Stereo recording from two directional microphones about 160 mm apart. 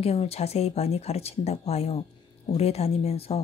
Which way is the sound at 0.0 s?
40° left (ahead or behind).